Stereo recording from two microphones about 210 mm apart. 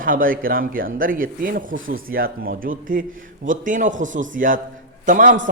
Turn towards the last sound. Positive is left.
turn(degrees=-40)  # may be behind; listen again after turning